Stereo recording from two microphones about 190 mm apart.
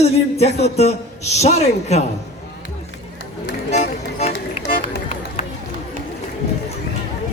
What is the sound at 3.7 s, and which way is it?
Music, 35° left (ahead or behind).